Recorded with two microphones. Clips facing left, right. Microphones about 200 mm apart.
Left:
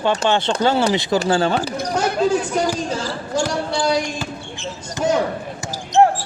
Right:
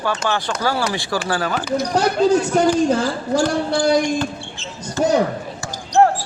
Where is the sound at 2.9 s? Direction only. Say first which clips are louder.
Right 5 dB; 55° right (ahead or behind).